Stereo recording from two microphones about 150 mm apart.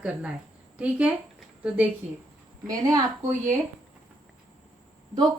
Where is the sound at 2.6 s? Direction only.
25° right (ahead or behind).